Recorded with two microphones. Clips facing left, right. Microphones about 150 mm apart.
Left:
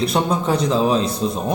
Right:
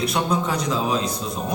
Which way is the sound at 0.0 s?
25° left (ahead or behind).